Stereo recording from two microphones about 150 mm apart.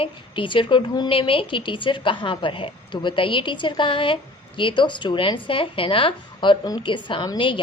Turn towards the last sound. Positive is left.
turn(degrees=35)  # may be behind; listen again after turning